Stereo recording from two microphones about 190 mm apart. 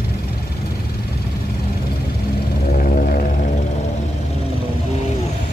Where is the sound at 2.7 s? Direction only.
45° left (ahead or behind).